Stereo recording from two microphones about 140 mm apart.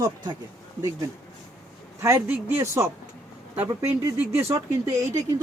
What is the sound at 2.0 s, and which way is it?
A man's voice, 20° right (ahead or behind).